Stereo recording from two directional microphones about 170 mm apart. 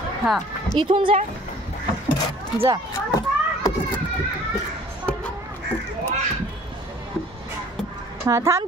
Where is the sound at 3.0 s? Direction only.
20° left (ahead or behind).